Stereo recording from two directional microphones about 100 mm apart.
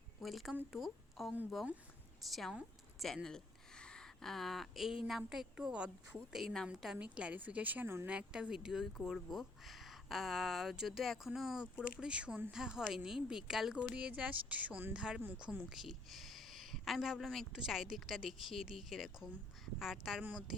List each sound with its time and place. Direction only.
0.2 s speech: centre (ahead or behind)
2.3 s a woman's voice: centre (ahead or behind)
3.2 s a sound: 5° left (ahead or behind)
5.0 s a woman's voice: centre (ahead or behind)
6.3 s a woman's voice: centre (ahead or behind)
6.9 s a woman's voice: 10° right (ahead or behind)
8.1 s a woman's voice: 5° right (ahead or behind)